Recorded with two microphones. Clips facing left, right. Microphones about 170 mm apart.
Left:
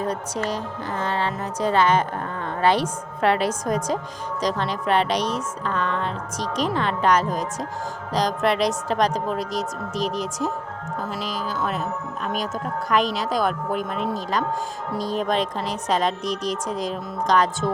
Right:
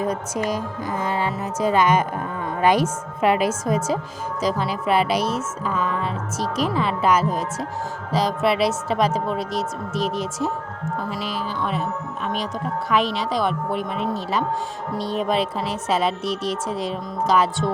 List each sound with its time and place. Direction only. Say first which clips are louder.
0.0 s a woman's voice: right 2 dB; 10° right (ahead or behind)
11.3 s speech: right 1 dB; 40° left (ahead or behind)
11.6 s a woman's voice: right 1 dB; centre (ahead or behind)